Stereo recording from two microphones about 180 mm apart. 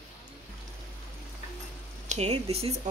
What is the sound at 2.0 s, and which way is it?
Speech, 40° right (ahead or behind).